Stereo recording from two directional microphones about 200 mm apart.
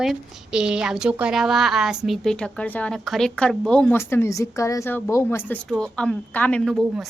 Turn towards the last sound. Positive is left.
turn(degrees=0)  # may be behind; listen again after turning